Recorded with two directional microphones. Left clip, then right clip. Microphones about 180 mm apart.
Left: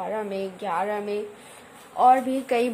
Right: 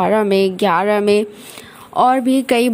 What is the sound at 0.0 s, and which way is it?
A woman's voice, 45° right (ahead or behind).